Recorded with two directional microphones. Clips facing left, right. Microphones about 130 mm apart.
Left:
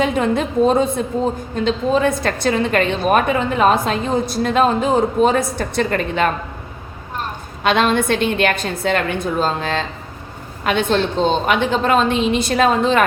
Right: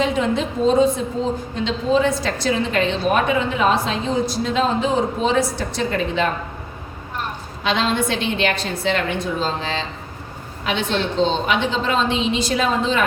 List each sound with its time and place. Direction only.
0.0 s a woman's voice: 50° left (ahead or behind)
7.6 s a woman's voice: 55° left (ahead or behind)